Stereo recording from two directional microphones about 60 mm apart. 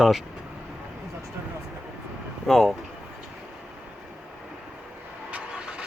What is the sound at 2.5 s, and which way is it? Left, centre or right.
Speech, centre.